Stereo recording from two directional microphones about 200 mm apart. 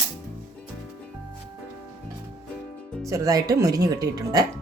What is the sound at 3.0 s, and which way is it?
Speech, 15° right (ahead or behind).